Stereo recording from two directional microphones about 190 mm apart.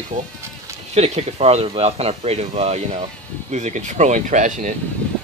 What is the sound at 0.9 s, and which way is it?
Speech, 35° right (ahead or behind).